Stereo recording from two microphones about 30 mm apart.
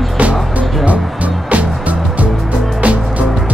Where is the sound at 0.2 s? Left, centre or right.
Right.